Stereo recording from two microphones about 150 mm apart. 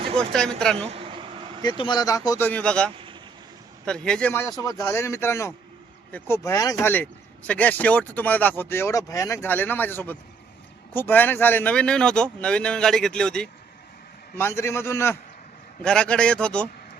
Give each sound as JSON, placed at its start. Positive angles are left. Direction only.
{"t": 0.2, "sound": "speech", "side_deg": 5}
{"t": 0.9, "sound": "vehicle", "side_deg": -40}
{"t": 1.6, "sound": "speech", "side_deg": 30}
{"t": 2.5, "sound": "speech", "side_deg": 5}
{"t": 14.3, "sound": "speech", "side_deg": 15}
{"t": 15.8, "sound": "speech", "side_deg": 5}